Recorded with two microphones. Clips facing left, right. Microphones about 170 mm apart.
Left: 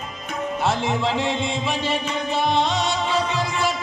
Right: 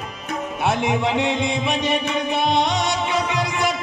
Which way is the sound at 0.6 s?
20° right (ahead or behind).